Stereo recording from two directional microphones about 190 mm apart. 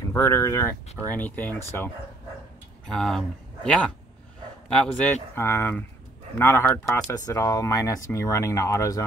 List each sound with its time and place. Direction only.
0.1 s speech: 15° left (ahead or behind)
2.9 s speech: 5° left (ahead or behind)